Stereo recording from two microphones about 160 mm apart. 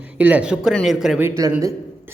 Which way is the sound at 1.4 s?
20° right (ahead or behind).